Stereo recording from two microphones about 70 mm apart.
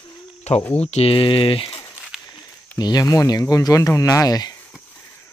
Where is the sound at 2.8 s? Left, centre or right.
Left.